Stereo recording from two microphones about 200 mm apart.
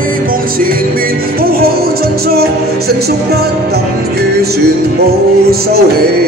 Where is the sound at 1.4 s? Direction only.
50° right (ahead or behind).